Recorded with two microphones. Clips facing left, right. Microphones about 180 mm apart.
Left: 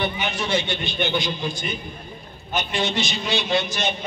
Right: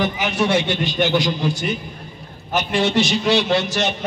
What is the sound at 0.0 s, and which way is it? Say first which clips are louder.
A man's voice: right 6 dB; 85° right.